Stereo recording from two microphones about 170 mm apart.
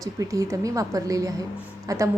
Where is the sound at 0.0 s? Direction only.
20° right (ahead or behind).